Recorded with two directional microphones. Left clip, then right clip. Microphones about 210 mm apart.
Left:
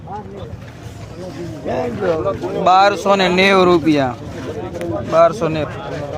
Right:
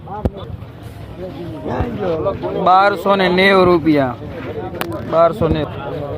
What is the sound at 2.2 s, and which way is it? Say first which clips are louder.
Speech: even; 50° left (ahead or behind).